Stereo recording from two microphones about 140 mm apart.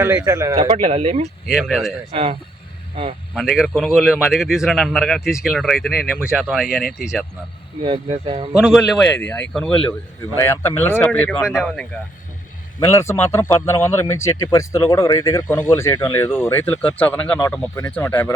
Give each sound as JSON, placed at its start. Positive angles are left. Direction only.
{"t": 0.3, "sound": "speech", "side_deg": -25}
{"t": 0.6, "sound": "speech", "side_deg": -45}
{"t": 1.5, "sound": "a man's voice", "side_deg": 0}
{"t": 2.1, "sound": "speech", "side_deg": -45}
{"t": 3.3, "sound": "a man's voice", "side_deg": 0}
{"t": 7.8, "sound": "speech", "side_deg": -40}
{"t": 8.5, "sound": "a man's voice", "side_deg": -5}
{"t": 10.3, "sound": "speech", "side_deg": 20}
{"t": 12.8, "sound": "speech", "side_deg": 20}